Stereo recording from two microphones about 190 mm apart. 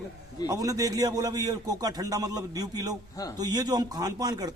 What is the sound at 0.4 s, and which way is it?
A man's voice, 20° right (ahead or behind).